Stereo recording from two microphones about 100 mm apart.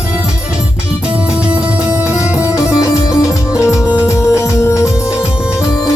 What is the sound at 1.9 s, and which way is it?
Music, 10° right (ahead or behind).